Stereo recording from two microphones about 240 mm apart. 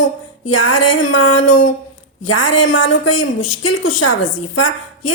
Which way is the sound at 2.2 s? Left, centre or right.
Left.